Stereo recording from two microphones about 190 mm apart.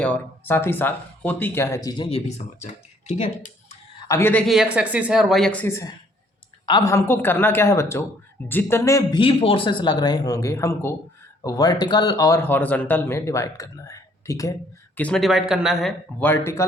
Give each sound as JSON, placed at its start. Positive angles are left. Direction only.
{"t": 0.0, "sound": "speech", "side_deg": 10}
{"t": 4.1, "sound": "speech", "side_deg": 10}
{"t": 14.9, "sound": "speech", "side_deg": 5}
{"t": 16.2, "sound": "speech", "side_deg": 10}